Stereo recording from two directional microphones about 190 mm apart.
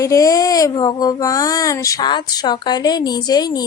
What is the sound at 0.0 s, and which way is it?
Speech, 20° left (ahead or behind).